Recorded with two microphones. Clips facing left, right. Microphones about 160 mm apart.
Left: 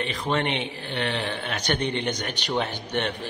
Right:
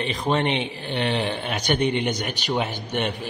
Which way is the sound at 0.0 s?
20° right (ahead or behind).